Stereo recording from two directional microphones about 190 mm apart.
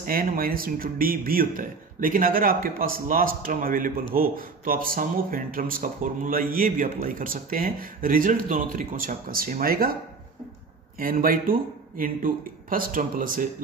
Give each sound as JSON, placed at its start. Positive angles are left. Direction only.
{"t": 0.0, "sound": "speech", "side_deg": -50}
{"t": 11.0, "sound": "speech", "side_deg": -45}